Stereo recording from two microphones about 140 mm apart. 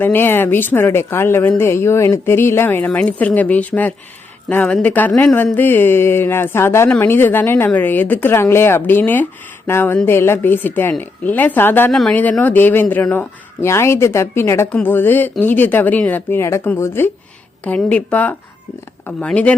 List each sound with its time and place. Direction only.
0.0 s speech: 15° left (ahead or behind)
11.9 s speech: centre (ahead or behind)